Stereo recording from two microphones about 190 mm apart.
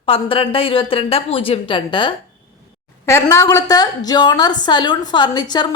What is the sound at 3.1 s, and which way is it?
A woman's voice, 15° left (ahead or behind).